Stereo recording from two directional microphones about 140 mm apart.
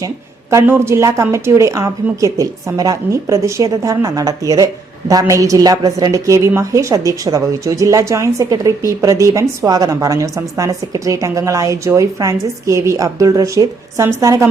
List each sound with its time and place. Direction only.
0.5 s a woman's voice: 15° right (ahead or behind)